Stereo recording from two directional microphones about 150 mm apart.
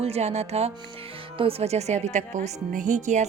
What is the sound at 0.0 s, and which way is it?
Speech, 45° right (ahead or behind).